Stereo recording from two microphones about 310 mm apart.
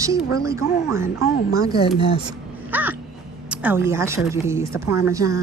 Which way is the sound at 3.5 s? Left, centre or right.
Centre.